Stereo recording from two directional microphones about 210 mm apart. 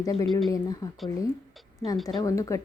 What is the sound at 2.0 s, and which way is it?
Speech, 15° left (ahead or behind).